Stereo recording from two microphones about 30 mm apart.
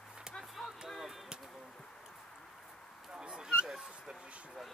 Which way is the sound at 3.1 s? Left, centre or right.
Right.